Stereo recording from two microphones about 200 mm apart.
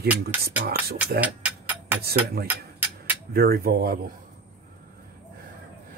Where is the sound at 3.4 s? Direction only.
50° right (ahead or behind).